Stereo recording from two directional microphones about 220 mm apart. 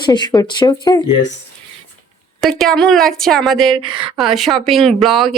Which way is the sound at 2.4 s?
Centre (ahead or behind).